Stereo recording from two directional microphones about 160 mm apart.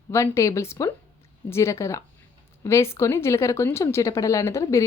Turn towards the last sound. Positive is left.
turn(degrees=20)  # may be behind; listen again after turning